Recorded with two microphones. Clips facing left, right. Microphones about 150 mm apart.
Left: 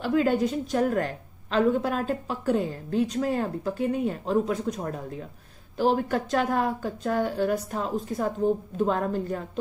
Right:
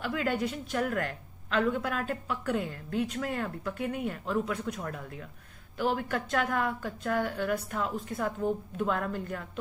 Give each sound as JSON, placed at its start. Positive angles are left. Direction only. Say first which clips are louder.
{"t": 0.0, "sound": "a woman's voice", "louder": "left 7 dB", "side_deg": 35}